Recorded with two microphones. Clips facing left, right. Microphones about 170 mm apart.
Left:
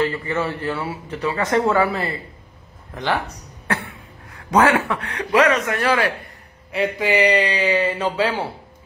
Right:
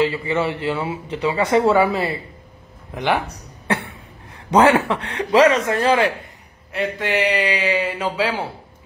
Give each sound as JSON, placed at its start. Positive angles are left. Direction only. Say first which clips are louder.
{"t": 0.0, "sound": "speech", "louder": "right 2 dB", "side_deg": -10}
{"t": 4.3, "sound": "speech", "louder": "right 2 dB", "side_deg": -25}
{"t": 6.7, "sound": "speech", "louder": "left 2 dB", "side_deg": 0}